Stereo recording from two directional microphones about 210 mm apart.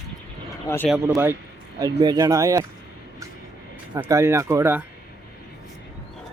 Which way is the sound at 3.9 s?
15° right (ahead or behind).